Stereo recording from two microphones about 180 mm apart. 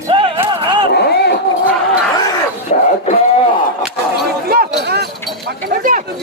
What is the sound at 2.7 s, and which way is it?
Speech, 45° left (ahead or behind).